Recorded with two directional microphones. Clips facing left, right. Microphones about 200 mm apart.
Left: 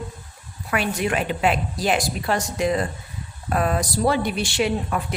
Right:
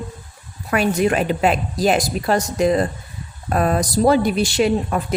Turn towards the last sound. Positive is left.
turn(degrees=-40)  # may be behind; listen again after turning